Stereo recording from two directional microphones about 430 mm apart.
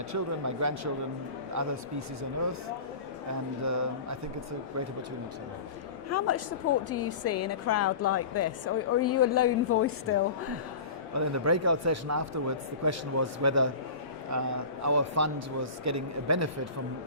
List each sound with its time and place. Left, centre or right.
0.1 s a man's voice: right
3.6 s a man's voice: right
6.1 s a woman's voice: left
11.1 s a man's voice: right